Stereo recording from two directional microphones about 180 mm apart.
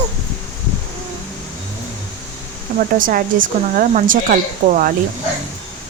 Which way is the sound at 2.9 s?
50° right (ahead or behind).